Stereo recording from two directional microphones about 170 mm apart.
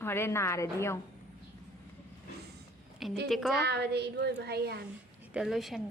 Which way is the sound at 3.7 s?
75° right (ahead or behind).